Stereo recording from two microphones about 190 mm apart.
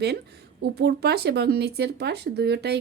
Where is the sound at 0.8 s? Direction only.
60° right (ahead or behind).